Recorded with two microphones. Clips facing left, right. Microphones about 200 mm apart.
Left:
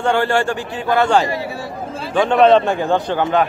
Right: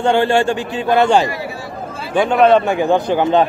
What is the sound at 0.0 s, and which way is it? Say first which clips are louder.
A man's voice: right 3 dB; 20° right (ahead or behind).